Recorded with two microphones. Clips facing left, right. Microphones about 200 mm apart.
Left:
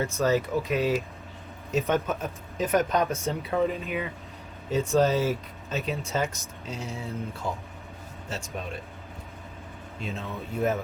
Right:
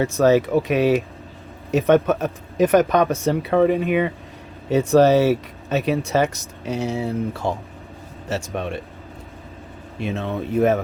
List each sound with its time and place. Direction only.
0.0 s speech: 70° right (ahead or behind)
10.0 s speech: 75° right (ahead or behind)